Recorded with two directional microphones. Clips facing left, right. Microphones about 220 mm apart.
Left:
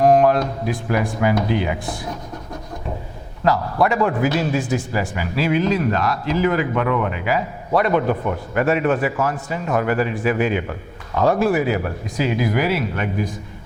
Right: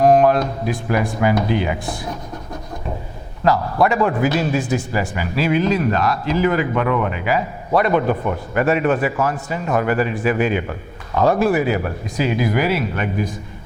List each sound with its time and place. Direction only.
0.0 s a man's voice: 15° right (ahead or behind)
3.4 s a man's voice: 15° right (ahead or behind)